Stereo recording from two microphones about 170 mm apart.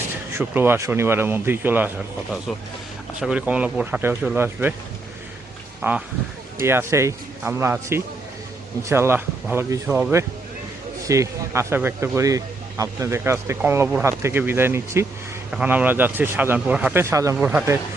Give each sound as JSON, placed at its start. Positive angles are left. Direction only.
{"t": 0.3, "sound": "speech", "side_deg": -10}
{"t": 3.2, "sound": "speech", "side_deg": -5}
{"t": 5.8, "sound": "speech", "side_deg": -15}
{"t": 11.0, "sound": "speech", "side_deg": -20}